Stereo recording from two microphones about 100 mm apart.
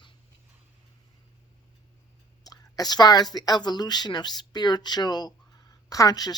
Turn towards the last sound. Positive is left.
turn(degrees=40)  # may be behind; listen again after turning